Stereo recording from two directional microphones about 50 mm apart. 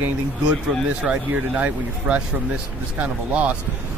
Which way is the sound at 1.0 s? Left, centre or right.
Right.